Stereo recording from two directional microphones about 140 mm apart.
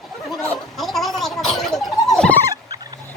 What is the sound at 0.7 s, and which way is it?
Gargling, centre (ahead or behind).